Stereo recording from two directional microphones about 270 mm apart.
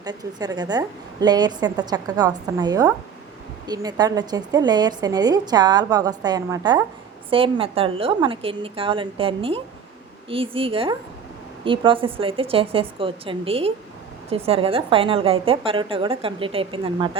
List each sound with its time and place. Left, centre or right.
0.0 s a woman's voice: centre